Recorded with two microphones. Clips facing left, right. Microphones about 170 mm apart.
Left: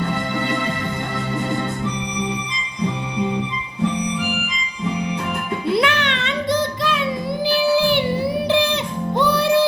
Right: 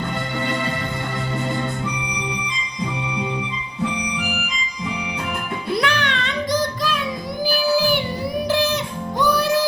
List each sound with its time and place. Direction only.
5.7 s music: 20° left (ahead or behind)
7.4 s child singing: 25° left (ahead or behind)
8.4 s music: 25° left (ahead or behind)